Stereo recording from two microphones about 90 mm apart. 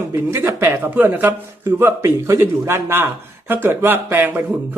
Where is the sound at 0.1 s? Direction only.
25° right (ahead or behind).